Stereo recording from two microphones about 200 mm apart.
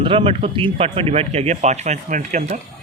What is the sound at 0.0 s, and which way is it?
Speech, 25° right (ahead or behind).